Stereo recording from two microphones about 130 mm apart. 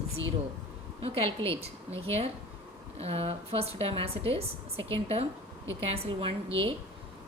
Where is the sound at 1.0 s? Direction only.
45° right (ahead or behind).